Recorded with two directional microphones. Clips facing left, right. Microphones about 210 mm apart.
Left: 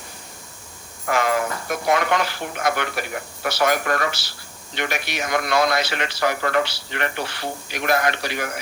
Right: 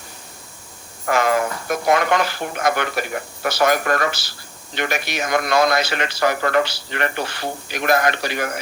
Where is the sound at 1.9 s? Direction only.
45° right (ahead or behind).